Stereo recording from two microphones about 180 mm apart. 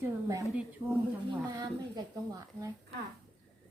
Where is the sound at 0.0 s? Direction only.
15° right (ahead or behind).